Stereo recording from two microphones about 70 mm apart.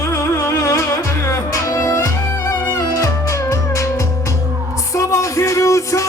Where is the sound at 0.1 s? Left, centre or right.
Left.